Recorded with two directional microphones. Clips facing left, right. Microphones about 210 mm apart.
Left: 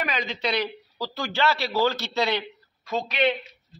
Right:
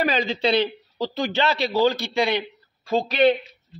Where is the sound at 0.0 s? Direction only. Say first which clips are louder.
Right 7 dB; 30° right (ahead or behind); by 2.4 s 15° right (ahead or behind).